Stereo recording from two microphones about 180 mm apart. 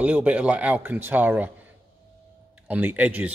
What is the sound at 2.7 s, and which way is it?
Speech, 10° right (ahead or behind).